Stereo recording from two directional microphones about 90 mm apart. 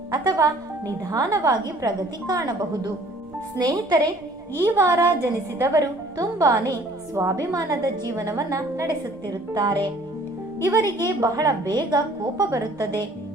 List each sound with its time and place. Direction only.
0.1 s a woman's voice: 45° right (ahead or behind)
4.6 s a woman's voice: 30° right (ahead or behind)
9.2 s a woman's voice: 45° right (ahead or behind)